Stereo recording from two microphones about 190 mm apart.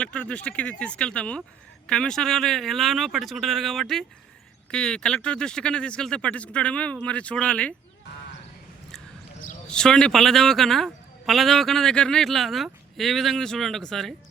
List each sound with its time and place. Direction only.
0.0 s a man's voice: 5° left (ahead or behind)
9.6 s a man's voice: 5° left (ahead or behind)